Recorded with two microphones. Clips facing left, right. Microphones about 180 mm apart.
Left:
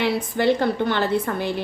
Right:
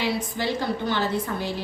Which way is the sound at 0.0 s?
60° left (ahead or behind).